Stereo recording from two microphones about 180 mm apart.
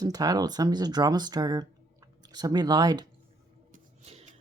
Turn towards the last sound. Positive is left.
turn(degrees=-40)  # may be behind; listen again after turning